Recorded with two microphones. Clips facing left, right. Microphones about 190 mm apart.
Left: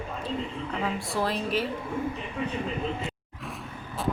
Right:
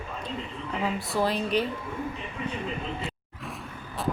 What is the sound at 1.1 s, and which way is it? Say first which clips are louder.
Speech: right 3 dB; centre (ahead or behind).